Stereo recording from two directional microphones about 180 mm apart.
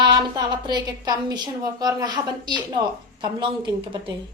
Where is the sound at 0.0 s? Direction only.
25° right (ahead or behind).